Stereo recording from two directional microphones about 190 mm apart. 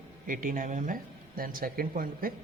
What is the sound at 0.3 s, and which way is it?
Speech, 45° right (ahead or behind).